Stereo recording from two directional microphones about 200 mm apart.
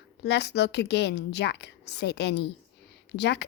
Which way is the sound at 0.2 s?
55° left (ahead or behind).